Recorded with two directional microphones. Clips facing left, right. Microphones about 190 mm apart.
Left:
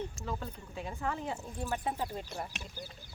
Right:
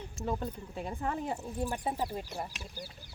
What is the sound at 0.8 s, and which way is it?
Speech, 45° right (ahead or behind).